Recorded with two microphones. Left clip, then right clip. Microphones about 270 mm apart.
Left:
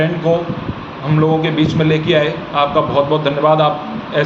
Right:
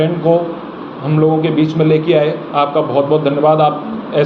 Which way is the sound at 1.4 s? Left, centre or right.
Left.